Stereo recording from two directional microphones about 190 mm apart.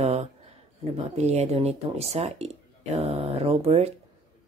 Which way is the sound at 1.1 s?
35° right (ahead or behind).